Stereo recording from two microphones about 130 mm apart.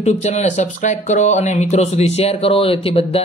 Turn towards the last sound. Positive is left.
turn(degrees=45)  # may be behind; listen again after turning